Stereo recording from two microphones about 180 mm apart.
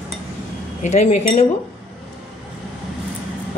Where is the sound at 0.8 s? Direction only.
40° left (ahead or behind).